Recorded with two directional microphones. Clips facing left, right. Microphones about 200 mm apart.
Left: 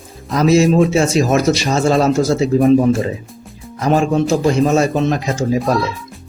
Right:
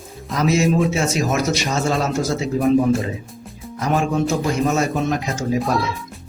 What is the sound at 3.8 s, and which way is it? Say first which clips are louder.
A man's voice: left 5 dB; 30° left (ahead or behind).